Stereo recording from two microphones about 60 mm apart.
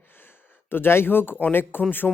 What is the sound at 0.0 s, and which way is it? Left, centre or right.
Speech, left.